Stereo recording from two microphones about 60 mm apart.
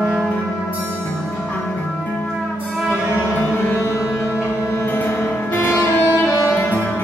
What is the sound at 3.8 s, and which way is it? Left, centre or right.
Music, left.